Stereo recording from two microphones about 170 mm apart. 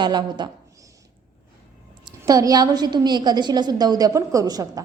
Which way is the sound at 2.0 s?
20° right (ahead or behind).